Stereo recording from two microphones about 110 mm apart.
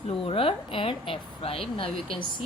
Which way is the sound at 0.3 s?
55° left (ahead or behind).